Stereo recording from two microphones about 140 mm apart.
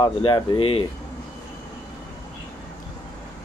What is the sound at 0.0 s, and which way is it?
Speech, 35° left (ahead or behind).